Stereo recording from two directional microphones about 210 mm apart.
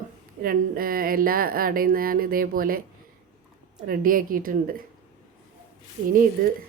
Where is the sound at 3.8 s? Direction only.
40° right (ahead or behind).